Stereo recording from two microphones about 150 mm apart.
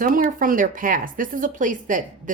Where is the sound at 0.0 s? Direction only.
70° right (ahead or behind).